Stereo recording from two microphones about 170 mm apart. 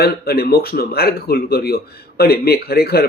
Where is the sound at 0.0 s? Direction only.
65° left (ahead or behind).